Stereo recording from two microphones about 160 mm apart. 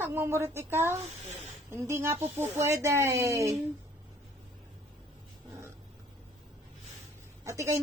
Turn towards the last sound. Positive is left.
turn(degrees=-15)  # may be behind; listen again after turning